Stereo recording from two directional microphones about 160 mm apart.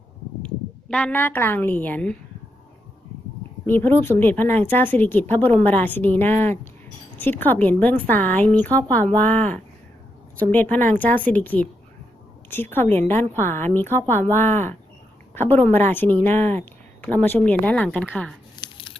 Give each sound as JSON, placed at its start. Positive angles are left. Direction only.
{"t": 0.4, "sound": "speech", "side_deg": 5}
{"t": 3.7, "sound": "speech", "side_deg": 10}
{"t": 18.6, "sound": "a sound", "side_deg": 30}